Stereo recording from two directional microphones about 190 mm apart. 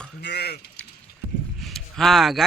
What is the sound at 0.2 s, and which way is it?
Speech, 60° left (ahead or behind).